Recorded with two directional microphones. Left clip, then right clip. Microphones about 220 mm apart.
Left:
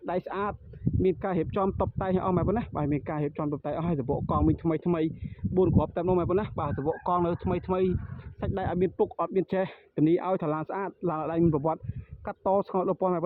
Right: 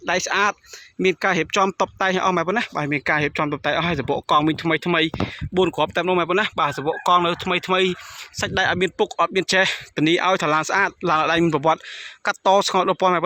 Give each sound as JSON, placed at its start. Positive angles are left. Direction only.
{"t": 0.0, "sound": "speech", "side_deg": -10}
{"t": 6.7, "sound": "speech", "side_deg": -30}
{"t": 7.5, "sound": "speech", "side_deg": -10}